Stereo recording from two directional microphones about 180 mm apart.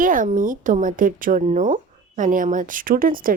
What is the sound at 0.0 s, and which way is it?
Speech, 50° right (ahead or behind).